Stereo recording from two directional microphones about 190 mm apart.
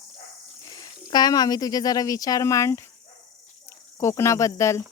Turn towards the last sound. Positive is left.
turn(degrees=15)  # may be behind; listen again after turning